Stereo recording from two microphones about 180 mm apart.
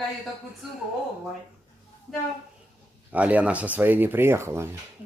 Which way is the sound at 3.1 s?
10° right (ahead or behind).